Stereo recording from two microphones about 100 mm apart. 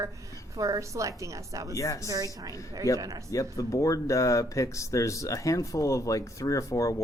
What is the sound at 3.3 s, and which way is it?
Speech, 35° left (ahead or behind).